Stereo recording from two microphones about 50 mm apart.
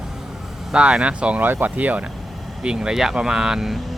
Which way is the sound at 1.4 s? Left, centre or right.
Right.